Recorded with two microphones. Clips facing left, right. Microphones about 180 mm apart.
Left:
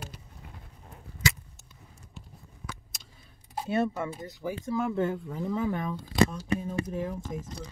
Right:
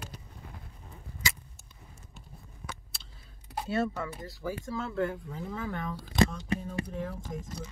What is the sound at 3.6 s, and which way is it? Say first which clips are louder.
Speech: left 3 dB; 20° left (ahead or behind).